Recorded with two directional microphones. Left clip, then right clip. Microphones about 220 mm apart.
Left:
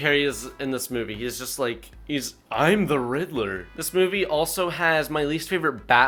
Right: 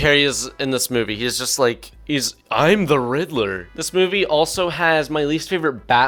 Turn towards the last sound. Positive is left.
turn(degrees=-25)  # may be behind; listen again after turning